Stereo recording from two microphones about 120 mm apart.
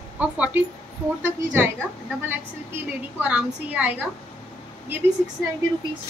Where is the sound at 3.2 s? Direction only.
10° right (ahead or behind).